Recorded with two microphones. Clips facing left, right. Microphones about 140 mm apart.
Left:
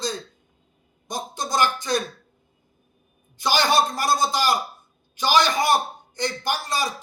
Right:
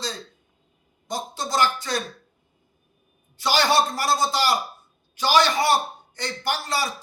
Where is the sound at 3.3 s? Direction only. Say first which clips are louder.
Even; 15° left (ahead or behind).